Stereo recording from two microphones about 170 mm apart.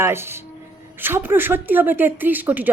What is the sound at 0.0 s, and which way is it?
Speech, 15° right (ahead or behind).